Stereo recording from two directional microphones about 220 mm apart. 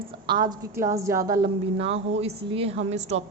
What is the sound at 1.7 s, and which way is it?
A woman's voice, 30° right (ahead or behind).